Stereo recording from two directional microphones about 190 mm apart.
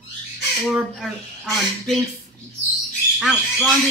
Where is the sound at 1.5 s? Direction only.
5° left (ahead or behind).